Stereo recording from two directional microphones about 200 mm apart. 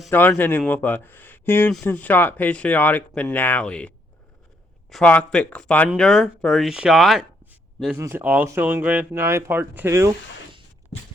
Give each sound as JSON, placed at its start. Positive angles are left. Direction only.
{"t": 0.1, "sound": "speech", "side_deg": 10}
{"t": 7.9, "sound": "speech", "side_deg": -10}